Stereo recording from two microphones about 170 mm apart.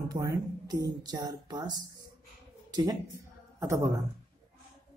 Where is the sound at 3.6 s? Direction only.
20° right (ahead or behind).